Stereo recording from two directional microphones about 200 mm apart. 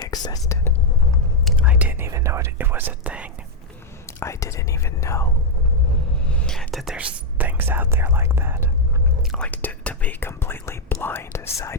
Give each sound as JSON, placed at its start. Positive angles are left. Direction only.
{"t": 0.0, "sound": "speech", "side_deg": 20}
{"t": 1.5, "sound": "speech", "side_deg": -5}
{"t": 4.2, "sound": "speech", "side_deg": 15}
{"t": 6.2, "sound": "speech", "side_deg": 5}
{"t": 9.3, "sound": "speech", "side_deg": 5}